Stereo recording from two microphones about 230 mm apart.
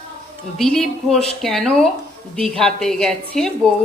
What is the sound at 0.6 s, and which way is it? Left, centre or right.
A woman's voice, centre.